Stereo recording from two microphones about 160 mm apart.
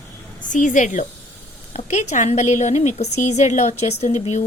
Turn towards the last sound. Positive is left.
turn(degrees=45)  # may be behind; listen again after turning